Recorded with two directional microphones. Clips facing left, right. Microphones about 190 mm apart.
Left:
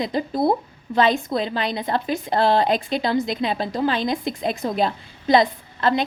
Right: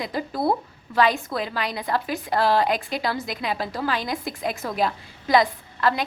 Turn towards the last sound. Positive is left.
turn(degrees=25)  # may be behind; listen again after turning